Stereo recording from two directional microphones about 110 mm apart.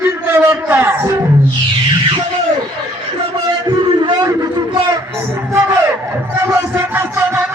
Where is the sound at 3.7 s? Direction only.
40° right (ahead or behind).